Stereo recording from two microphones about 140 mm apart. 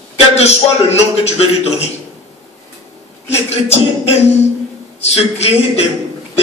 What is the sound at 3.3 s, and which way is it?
Speech, 45° left (ahead or behind).